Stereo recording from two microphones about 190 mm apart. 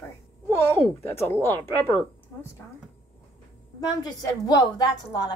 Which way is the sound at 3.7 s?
20° left (ahead or behind).